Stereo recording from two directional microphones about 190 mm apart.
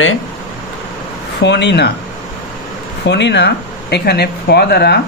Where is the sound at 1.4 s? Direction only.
65° left (ahead or behind).